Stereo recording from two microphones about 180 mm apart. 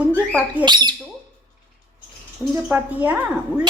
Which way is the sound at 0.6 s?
25° right (ahead or behind).